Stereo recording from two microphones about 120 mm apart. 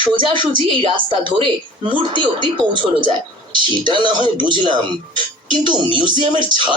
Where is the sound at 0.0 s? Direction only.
45° right (ahead or behind).